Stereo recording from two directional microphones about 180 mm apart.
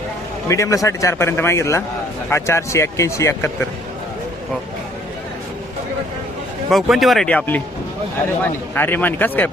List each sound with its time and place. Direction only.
0.4 s a man's voice: 15° left (ahead or behind)
6.7 s speech: centre (ahead or behind)
8.7 s a man's voice: 10° left (ahead or behind)